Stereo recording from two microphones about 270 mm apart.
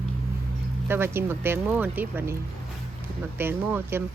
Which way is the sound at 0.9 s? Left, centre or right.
Centre.